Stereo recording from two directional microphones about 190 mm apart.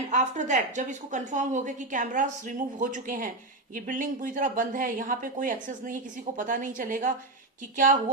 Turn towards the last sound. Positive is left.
turn(degrees=-45)  # may be behind; listen again after turning